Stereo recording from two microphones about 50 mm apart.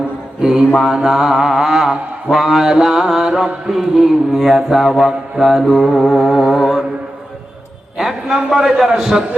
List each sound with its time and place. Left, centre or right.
0.4 s mantra: centre
7.9 s a sound: centre
8.9 s mantra: centre